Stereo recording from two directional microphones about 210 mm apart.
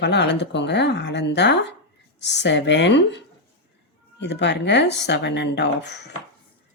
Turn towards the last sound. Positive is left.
turn(degrees=55)  # may be behind; listen again after turning